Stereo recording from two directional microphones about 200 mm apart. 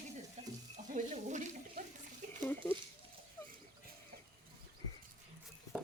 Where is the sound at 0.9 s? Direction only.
35° right (ahead or behind).